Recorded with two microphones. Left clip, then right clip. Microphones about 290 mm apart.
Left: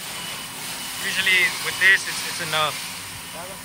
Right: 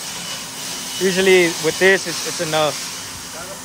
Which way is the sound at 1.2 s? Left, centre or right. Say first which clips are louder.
Right 4 dB; right.